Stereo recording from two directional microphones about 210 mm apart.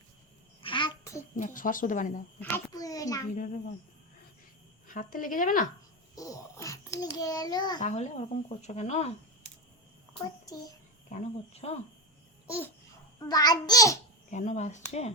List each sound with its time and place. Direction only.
0.6 s a sound: 25° left (ahead or behind)
1.4 s speech: 40° left (ahead or behind)
2.4 s a sound: 15° left (ahead or behind)
3.3 s speech: 35° left (ahead or behind)
4.9 s speech: 40° left (ahead or behind)
6.1 s a child's voice: 15° left (ahead or behind)
7.8 s speech: 35° left (ahead or behind)
11.1 s speech: 30° left (ahead or behind)
13.1 s a child's voice: 20° left (ahead or behind)
14.3 s speech: 35° left (ahead or behind)